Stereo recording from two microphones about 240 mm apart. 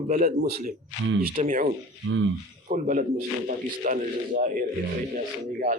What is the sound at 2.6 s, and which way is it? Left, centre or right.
Speech, right.